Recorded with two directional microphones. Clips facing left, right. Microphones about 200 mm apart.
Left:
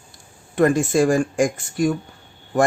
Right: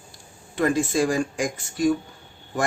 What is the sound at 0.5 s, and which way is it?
Speech, 50° left (ahead or behind).